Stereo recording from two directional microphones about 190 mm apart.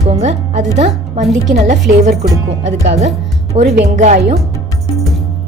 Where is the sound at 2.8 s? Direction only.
35° right (ahead or behind).